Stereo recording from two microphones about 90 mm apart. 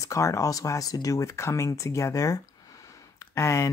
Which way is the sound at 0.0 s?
35° left (ahead or behind).